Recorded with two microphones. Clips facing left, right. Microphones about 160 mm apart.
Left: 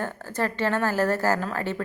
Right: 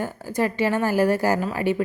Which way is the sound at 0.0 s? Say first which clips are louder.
Right 4 dB; 10° right (ahead or behind).